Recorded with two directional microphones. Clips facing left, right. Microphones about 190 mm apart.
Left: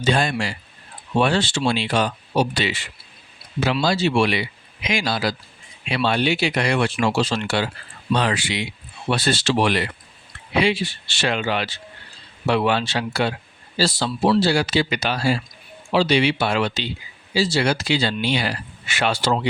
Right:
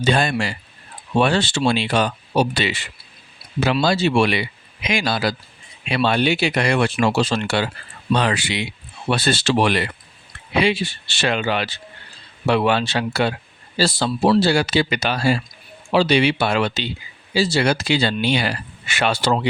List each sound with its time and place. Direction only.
0.0 s speech: 60° right (ahead or behind)